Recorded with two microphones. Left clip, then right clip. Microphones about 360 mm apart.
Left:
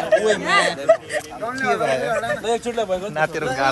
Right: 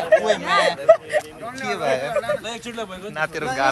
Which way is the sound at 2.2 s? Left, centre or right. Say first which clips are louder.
Left 4 dB; left.